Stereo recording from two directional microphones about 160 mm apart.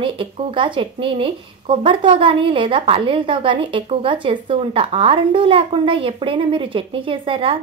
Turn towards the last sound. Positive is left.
turn(degrees=-35)  # may be behind; listen again after turning